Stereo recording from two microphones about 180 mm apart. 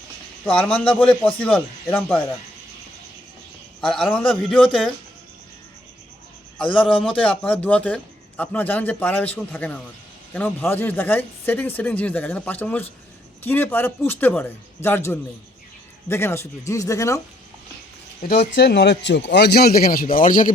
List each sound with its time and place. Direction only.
0.4 s a man's voice: 5° left (ahead or behind)
3.8 s a man's voice: 5° left (ahead or behind)
7.2 s a man's voice: 10° left (ahead or behind)
18.2 s a man's voice: 60° left (ahead or behind)